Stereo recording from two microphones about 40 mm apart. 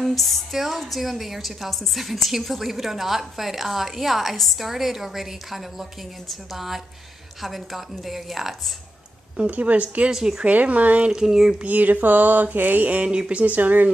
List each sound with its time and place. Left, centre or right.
0.0 s a woman's voice: centre
9.5 s a woman's voice: right
10.1 s speech: centre
10.4 s a woman's voice: right
11.1 s speech: centre
11.6 s a sound: right
13.0 s speech: right
13.4 s a sound: right